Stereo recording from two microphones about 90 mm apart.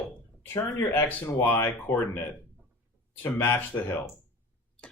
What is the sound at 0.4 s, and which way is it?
Speech, 30° left (ahead or behind).